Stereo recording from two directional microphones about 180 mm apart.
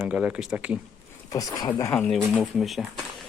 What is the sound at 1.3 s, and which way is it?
Speech, 20° left (ahead or behind).